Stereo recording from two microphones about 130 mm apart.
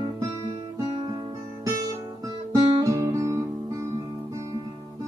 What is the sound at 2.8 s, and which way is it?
Guitar, 25° right (ahead or behind).